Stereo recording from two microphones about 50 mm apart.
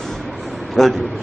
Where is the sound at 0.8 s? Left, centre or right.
Centre.